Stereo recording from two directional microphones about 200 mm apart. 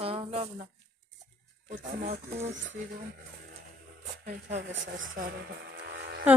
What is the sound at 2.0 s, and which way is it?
Speech, 35° right (ahead or behind).